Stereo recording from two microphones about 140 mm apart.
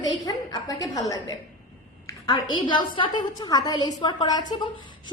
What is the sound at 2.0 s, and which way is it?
A woman's voice, 30° left (ahead or behind).